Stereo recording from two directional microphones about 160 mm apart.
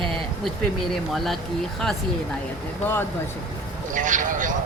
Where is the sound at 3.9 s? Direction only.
55° right (ahead or behind).